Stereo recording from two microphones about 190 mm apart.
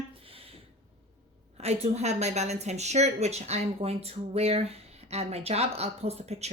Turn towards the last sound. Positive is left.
turn(degrees=-35)  # may be behind; listen again after turning